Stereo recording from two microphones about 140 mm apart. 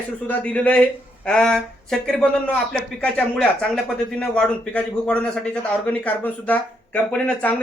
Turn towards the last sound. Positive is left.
turn(degrees=10)  # may be behind; listen again after turning